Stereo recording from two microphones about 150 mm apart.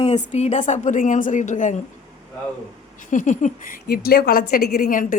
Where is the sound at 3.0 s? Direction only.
55° left (ahead or behind).